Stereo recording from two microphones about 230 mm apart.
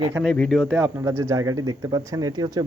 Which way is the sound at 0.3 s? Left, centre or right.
Centre.